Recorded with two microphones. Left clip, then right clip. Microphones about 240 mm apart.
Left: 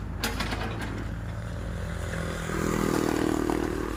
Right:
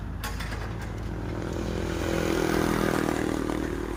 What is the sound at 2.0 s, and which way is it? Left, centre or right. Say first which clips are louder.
Vehicle: right 8 dB; right.